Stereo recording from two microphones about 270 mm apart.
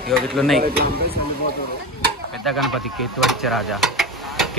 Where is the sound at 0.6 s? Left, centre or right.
Right.